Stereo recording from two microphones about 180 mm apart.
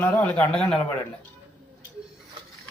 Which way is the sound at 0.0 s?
5° left (ahead or behind).